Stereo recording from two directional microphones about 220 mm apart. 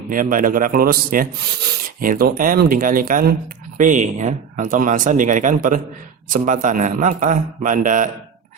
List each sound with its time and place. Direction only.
0.1 s speech: 40° right (ahead or behind)